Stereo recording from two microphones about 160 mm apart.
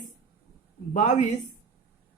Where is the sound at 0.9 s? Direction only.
50° left (ahead or behind).